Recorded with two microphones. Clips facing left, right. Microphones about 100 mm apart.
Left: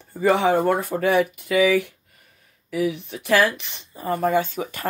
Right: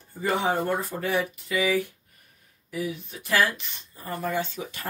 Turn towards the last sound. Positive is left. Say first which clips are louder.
# left 7 dB
turn(degrees=60)  # may be behind; listen again after turning